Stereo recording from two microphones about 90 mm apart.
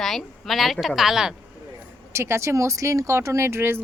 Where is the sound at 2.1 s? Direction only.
30° right (ahead or behind).